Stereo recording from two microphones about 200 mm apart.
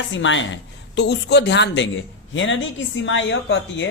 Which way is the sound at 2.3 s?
70° left (ahead or behind).